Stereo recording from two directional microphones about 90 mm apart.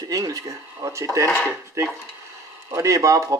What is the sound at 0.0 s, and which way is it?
Speech, 40° right (ahead or behind).